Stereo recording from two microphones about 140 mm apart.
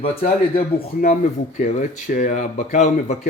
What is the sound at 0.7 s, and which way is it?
Speech, 65° left (ahead or behind).